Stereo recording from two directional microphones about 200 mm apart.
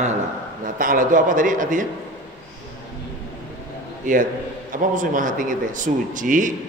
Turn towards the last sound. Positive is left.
turn(degrees=-40)  # may be behind; listen again after turning